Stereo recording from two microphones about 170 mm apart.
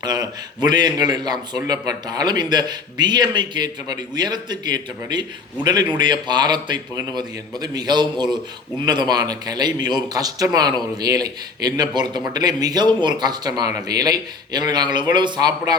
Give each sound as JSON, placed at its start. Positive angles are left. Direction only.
{"t": 0.0, "sound": "a man's voice", "side_deg": -25}